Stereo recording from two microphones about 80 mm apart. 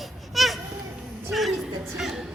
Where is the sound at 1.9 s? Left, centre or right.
Centre.